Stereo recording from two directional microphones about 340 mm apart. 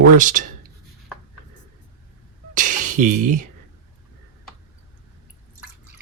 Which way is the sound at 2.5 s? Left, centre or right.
Right.